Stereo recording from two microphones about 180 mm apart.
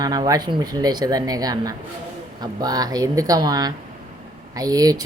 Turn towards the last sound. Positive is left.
turn(degrees=-20)  # may be behind; listen again after turning